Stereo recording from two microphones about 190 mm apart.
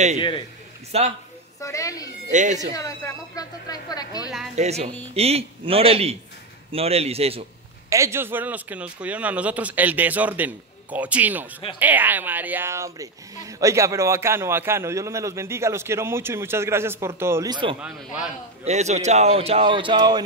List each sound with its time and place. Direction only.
0.9 s speech: 35° right (ahead or behind)
1.6 s speech: 15° left (ahead or behind)
2.3 s speech: 40° right (ahead or behind)
2.7 s speech: 15° left (ahead or behind)
4.6 s speech: 35° right (ahead or behind)
7.9 s speech: 15° right (ahead or behind)
17.7 s speech: 5° right (ahead or behind)
18.6 s speech: 35° right (ahead or behind)